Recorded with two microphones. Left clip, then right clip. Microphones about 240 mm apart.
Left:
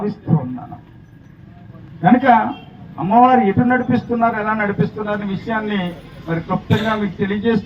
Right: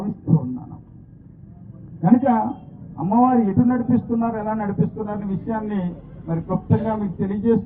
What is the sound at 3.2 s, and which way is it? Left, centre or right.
A man's voice, left.